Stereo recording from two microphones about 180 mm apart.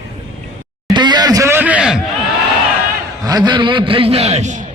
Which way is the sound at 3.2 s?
20° right (ahead or behind).